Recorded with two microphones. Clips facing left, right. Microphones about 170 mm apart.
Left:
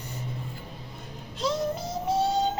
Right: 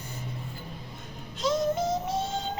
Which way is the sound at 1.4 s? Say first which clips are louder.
Right 2 dB; 30° left (ahead or behind).